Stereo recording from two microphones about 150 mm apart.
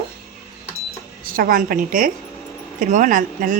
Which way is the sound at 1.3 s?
70° right (ahead or behind).